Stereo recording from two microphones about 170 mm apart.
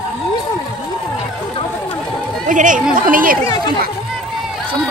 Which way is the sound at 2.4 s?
50° right (ahead or behind).